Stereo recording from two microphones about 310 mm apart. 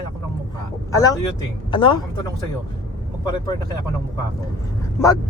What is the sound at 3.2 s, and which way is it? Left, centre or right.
Speech, centre.